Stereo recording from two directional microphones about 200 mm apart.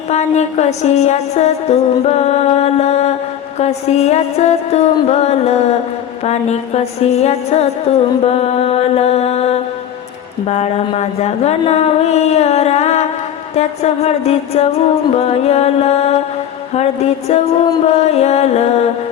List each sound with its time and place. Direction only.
0.1 s music: 35° left (ahead or behind)